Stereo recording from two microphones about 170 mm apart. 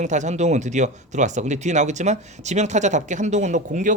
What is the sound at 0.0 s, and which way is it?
Speech, 45° right (ahead or behind).